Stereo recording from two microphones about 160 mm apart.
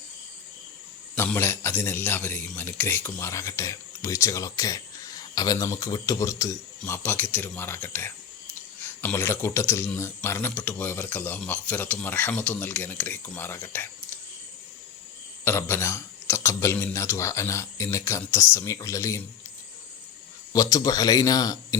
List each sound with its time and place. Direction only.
1.1 s speech: 15° left (ahead or behind)
15.4 s speech: 15° left (ahead or behind)
20.5 s speech: 20° left (ahead or behind)